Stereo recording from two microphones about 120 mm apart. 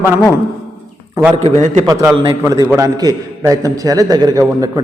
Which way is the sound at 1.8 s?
30° right (ahead or behind).